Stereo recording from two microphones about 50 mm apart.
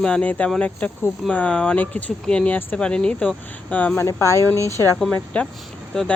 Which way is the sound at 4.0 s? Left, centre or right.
Left.